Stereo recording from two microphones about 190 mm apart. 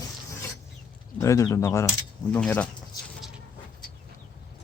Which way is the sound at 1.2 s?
15° left (ahead or behind).